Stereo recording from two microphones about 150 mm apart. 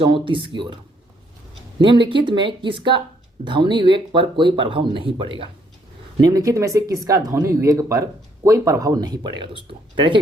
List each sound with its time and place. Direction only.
0.0 s speech: 35° right (ahead or behind)
1.8 s speech: 35° right (ahead or behind)
6.2 s speech: 20° right (ahead or behind)